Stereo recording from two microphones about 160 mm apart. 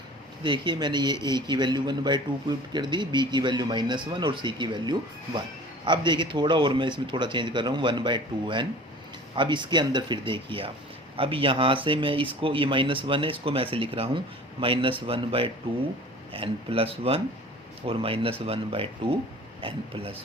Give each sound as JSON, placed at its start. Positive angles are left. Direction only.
{"t": 0.4, "sound": "speech", "side_deg": -30}